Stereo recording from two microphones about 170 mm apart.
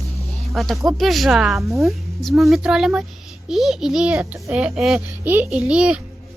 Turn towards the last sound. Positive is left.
turn(degrees=-5)  # may be behind; listen again after turning